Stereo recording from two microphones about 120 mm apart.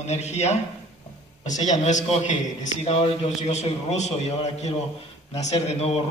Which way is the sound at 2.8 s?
55° left (ahead or behind).